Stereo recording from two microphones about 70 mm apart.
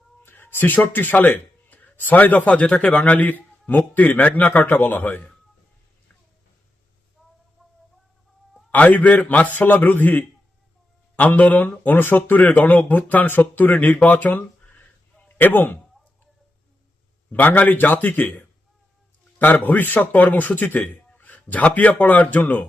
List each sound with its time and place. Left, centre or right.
0.2 s speech: left
8.7 s a man's voice: left
17.3 s a man's voice: left